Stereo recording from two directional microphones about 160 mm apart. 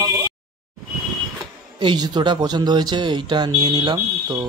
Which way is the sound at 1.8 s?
30° right (ahead or behind).